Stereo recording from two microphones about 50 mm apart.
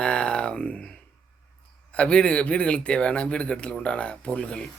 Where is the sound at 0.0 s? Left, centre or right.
Left.